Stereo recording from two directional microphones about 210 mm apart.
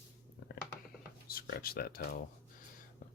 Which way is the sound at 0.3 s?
55° left (ahead or behind).